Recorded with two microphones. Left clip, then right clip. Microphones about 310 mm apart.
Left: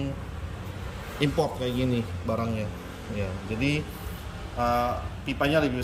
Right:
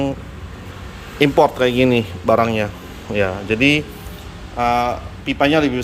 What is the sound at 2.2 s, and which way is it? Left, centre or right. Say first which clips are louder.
Speech: right 16 dB; right.